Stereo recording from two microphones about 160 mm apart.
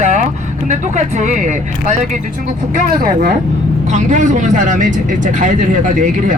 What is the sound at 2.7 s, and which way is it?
Speech, 55° right (ahead or behind).